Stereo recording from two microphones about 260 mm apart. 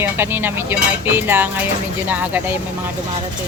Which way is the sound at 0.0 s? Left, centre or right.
Centre.